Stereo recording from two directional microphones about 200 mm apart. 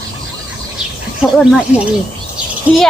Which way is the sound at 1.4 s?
5° right (ahead or behind).